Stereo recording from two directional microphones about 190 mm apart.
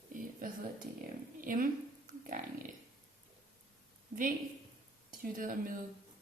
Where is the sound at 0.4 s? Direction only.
45° right (ahead or behind).